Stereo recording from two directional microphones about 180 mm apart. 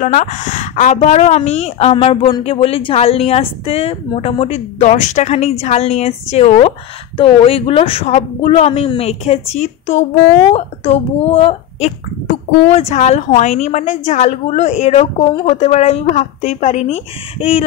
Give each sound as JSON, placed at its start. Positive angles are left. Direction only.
{"t": 0.0, "sound": "a woman's voice", "side_deg": 45}